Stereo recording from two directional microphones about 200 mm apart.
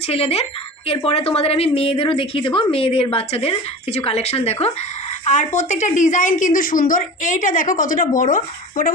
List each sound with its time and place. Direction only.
0.1 s a woman's voice: 30° left (ahead or behind)